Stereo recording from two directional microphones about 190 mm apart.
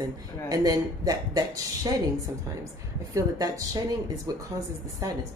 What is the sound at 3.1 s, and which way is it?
Speech, 20° right (ahead or behind).